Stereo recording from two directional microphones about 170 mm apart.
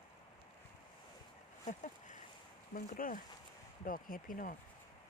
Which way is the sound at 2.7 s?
55° left (ahead or behind).